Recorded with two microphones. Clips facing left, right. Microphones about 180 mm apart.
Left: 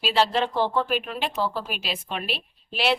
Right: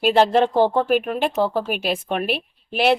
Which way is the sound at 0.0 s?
50° right (ahead or behind).